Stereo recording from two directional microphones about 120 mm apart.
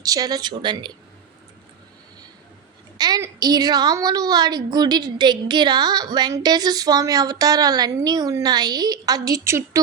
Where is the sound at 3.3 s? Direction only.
35° right (ahead or behind).